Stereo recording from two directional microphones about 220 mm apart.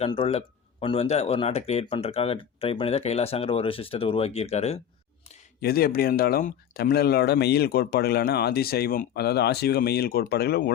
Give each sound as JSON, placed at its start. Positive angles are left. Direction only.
{"t": 0.0, "sound": "speech", "side_deg": 25}
{"t": 5.5, "sound": "speech", "side_deg": 45}